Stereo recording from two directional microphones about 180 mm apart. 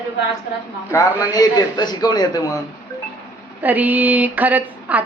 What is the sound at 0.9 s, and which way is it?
A man's voice, 15° left (ahead or behind).